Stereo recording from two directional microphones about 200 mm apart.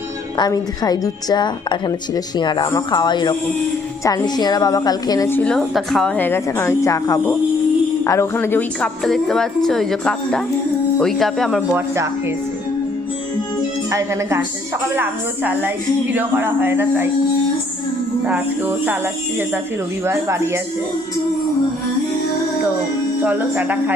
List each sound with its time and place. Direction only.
0.3 s a woman's voice: 20° left (ahead or behind); by 11.8 s centre (ahead or behind)
13.9 s speech: 15° right (ahead or behind)
16.1 s speech: 10° right (ahead or behind)
18.3 s speech: 10° right (ahead or behind)
20.1 s speech: 15° right (ahead or behind)
23.2 s speech: 10° right (ahead or behind)